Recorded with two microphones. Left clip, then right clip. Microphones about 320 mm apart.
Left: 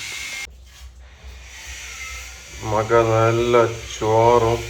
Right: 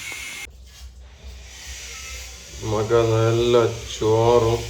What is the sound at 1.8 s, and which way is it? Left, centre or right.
Vehicle, centre.